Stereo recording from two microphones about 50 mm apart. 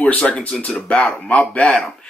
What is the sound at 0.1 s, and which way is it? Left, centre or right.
Speech, left.